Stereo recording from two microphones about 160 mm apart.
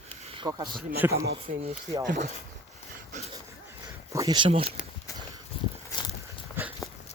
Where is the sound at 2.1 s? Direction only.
55° right (ahead or behind).